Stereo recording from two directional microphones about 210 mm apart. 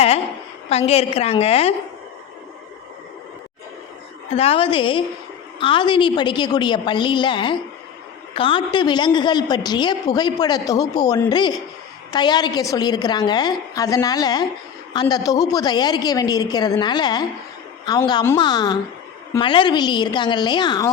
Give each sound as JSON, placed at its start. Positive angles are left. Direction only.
{"t": 0.7, "sound": "a woman's voice", "side_deg": 30}
{"t": 4.3, "sound": "a woman's voice", "side_deg": 30}